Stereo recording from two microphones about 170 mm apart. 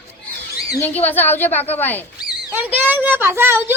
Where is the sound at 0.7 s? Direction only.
10° left (ahead or behind).